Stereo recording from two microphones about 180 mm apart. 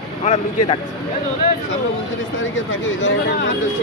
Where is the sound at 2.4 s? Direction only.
90° left.